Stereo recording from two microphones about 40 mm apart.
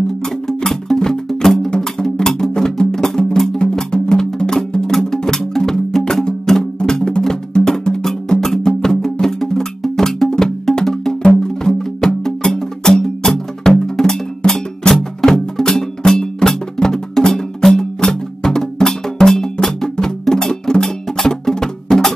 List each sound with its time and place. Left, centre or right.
0.6 s music: centre